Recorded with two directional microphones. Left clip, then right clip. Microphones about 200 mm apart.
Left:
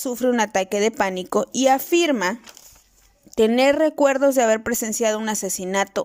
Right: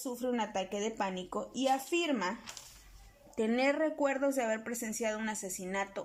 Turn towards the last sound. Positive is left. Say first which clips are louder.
# left 14 dB
turn(degrees=40)  # may be behind; listen again after turning